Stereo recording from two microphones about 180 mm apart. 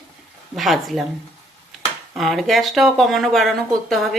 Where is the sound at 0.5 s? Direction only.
Centre (ahead or behind).